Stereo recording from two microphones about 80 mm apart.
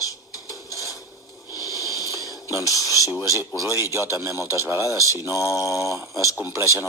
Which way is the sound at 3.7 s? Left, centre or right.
Right.